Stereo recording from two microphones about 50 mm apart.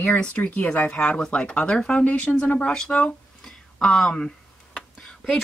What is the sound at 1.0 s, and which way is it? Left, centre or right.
Speech, centre.